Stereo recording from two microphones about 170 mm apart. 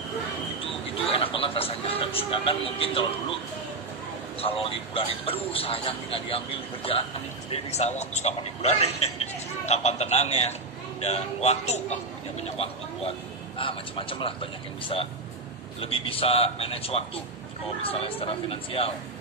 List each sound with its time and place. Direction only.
1.1 s speech: 35° left (ahead or behind)
4.4 s speech: 35° left (ahead or behind)